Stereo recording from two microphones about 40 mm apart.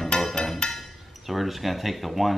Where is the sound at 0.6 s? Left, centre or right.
Centre.